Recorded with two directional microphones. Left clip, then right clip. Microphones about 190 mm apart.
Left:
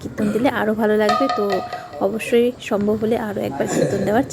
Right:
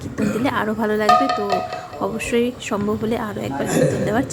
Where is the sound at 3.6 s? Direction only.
60° right (ahead or behind).